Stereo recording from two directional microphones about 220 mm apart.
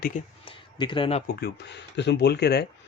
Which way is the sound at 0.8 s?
20° left (ahead or behind).